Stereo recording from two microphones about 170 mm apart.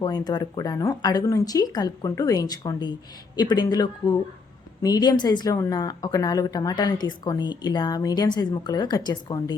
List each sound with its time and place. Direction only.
0.0 s a woman's voice: 25° left (ahead or behind)